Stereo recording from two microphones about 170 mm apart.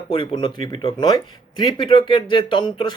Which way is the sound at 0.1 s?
30° left (ahead or behind).